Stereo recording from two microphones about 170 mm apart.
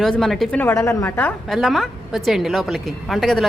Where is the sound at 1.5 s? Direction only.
Centre (ahead or behind).